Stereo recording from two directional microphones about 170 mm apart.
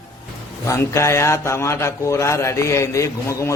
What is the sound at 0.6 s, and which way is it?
A man's voice, 15° left (ahead or behind).